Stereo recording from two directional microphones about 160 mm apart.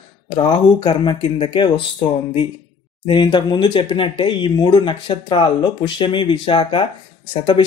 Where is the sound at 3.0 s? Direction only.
30° left (ahead or behind).